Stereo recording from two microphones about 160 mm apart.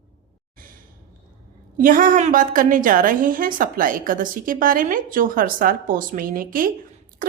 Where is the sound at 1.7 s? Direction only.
60° right (ahead or behind).